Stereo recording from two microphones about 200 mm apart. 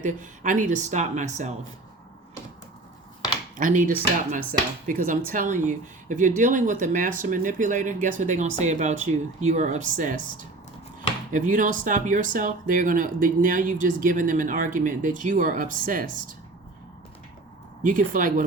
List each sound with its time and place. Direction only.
0.0 s speech: 40° right (ahead or behind)
3.6 s speech: 40° right (ahead or behind)
17.8 s speech: 40° right (ahead or behind)